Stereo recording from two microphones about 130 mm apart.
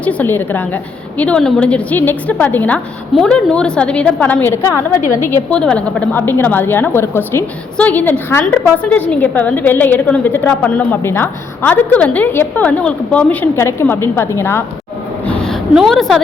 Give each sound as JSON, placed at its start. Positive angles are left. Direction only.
{"t": 0.0, "sound": "a woman's voice", "side_deg": 10}
{"t": 5.5, "sound": "a woman's voice", "side_deg": 5}
{"t": 15.3, "sound": "a sound", "side_deg": 5}
{"t": 15.7, "sound": "a woman's voice", "side_deg": 0}